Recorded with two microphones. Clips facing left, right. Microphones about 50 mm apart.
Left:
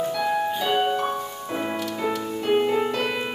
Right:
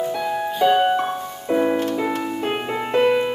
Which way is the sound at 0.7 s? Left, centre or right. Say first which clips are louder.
Right 8 dB; right.